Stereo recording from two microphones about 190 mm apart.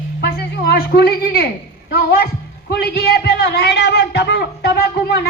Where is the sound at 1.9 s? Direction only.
55° left (ahead or behind).